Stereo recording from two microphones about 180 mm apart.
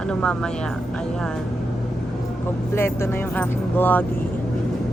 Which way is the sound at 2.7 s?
15° left (ahead or behind).